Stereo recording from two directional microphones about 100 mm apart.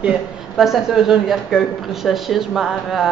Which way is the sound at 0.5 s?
Centre (ahead or behind).